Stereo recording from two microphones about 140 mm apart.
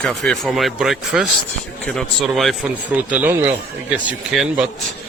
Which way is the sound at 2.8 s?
10° right (ahead or behind).